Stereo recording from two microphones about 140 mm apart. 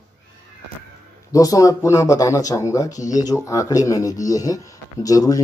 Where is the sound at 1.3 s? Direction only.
25° left (ahead or behind).